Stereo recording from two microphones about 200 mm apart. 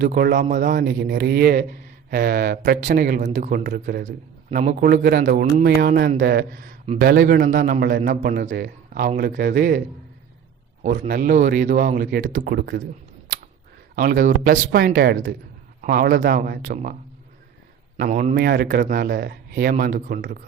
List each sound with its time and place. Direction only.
0.0 s a man's voice: 50° right (ahead or behind)
10.8 s a man's voice: 40° right (ahead or behind)
13.9 s a man's voice: 45° right (ahead or behind)
18.0 s speech: 40° right (ahead or behind)
18.3 s a man's voice: 50° right (ahead or behind)